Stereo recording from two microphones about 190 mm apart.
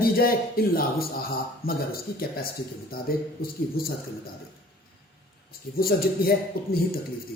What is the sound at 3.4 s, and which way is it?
Speech, 50° left (ahead or behind).